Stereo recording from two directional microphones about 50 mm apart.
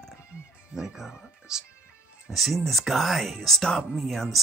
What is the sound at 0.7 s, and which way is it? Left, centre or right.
Speech, centre.